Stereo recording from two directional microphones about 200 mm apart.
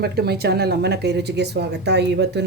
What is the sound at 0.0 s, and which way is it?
Speech, 55° right (ahead or behind).